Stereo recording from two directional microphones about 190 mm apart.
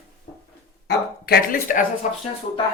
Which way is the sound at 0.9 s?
50° left (ahead or behind).